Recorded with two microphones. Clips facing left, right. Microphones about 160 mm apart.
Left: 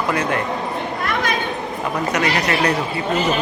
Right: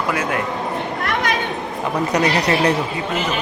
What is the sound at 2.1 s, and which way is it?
Speech, 35° right (ahead or behind).